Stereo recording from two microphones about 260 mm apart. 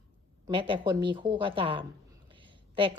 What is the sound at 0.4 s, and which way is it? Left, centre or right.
Speech, centre.